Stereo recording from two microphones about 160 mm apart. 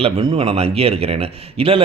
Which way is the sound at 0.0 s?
35° right (ahead or behind).